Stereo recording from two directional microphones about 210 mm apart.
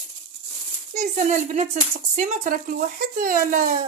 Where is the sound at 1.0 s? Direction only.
35° right (ahead or behind).